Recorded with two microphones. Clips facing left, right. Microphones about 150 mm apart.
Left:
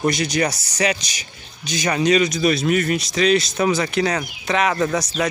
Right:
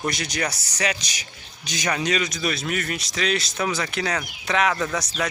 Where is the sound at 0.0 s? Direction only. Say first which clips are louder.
Left 7 dB; 10° left (ahead or behind).